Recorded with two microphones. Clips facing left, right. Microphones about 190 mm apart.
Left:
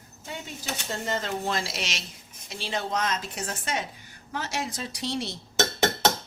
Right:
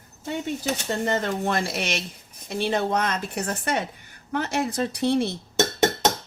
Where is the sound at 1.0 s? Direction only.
55° right (ahead or behind).